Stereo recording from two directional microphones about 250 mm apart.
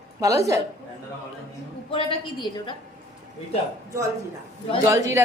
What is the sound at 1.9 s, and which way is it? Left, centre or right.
Speech, left.